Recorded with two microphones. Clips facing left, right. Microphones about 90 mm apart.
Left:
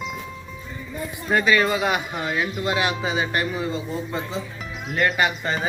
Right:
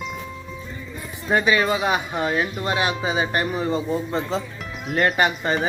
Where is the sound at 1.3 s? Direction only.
20° right (ahead or behind).